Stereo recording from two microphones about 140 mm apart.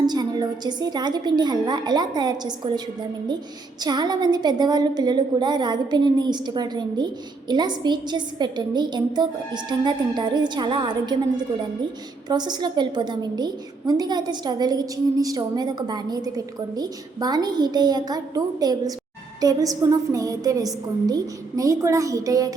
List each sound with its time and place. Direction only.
0.0 s a woman's voice: 30° right (ahead or behind)
3.8 s a woman's voice: 30° right (ahead or behind)
12.3 s a woman's voice: 30° right (ahead or behind)